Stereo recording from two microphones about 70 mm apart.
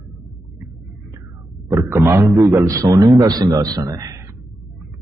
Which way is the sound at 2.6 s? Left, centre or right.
Right.